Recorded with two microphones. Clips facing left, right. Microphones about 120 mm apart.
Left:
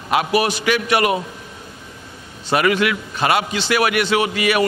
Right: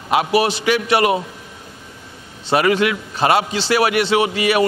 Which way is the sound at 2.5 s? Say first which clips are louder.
Right 1 dB; 30° right (ahead or behind).